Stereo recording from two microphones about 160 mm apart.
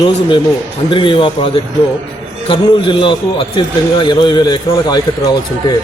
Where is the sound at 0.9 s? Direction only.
30° left (ahead or behind).